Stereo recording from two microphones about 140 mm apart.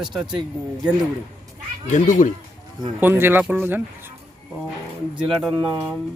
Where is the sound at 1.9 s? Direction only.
65° left (ahead or behind).